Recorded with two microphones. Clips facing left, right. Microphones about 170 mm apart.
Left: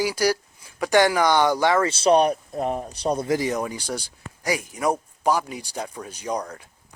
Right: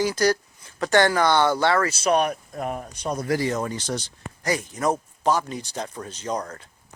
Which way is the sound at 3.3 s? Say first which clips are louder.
Left 1 dB; 15° left (ahead or behind).